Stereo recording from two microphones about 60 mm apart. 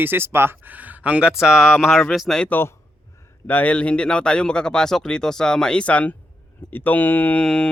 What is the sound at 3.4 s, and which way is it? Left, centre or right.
Speech, left.